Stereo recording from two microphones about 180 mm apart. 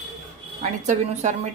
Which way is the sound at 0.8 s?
40° right (ahead or behind).